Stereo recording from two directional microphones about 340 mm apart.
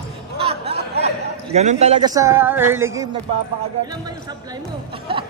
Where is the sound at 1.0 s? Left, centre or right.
Centre.